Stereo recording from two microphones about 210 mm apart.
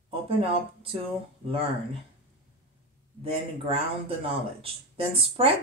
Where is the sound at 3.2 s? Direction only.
25° right (ahead or behind).